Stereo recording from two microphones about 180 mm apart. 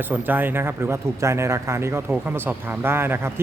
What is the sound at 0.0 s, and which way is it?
Speech, 10° right (ahead or behind).